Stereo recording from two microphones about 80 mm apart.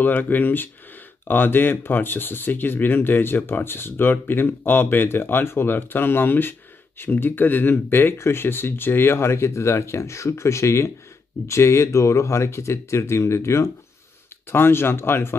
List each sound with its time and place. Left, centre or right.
0.0 s speech: left